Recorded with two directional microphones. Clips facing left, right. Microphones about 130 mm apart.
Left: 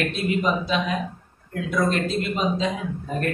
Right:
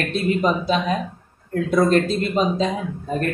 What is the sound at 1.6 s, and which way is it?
Speech, 35° right (ahead or behind).